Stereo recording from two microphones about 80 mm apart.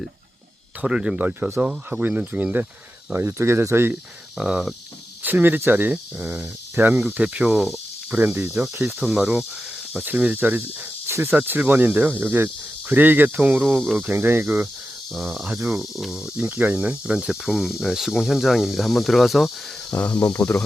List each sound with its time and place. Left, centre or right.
0.8 s cricket: centre
1.3 s speech: right
1.6 s speech: centre
3.1 s speech: right
4.4 s cricket: centre
5.2 s speech: right
6.7 s cricket: right
8.1 s speech: right
9.0 s cricket: centre
9.9 s speech: right
15.1 s speech: centre
19.9 s speech: left